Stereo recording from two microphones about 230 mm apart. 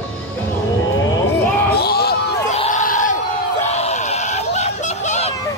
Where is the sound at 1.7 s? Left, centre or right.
Left.